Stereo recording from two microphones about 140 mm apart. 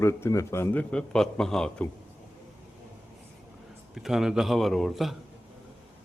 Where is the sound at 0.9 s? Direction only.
5° left (ahead or behind).